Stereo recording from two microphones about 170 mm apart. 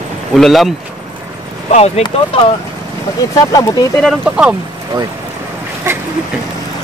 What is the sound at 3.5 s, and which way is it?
Speech, 20° left (ahead or behind).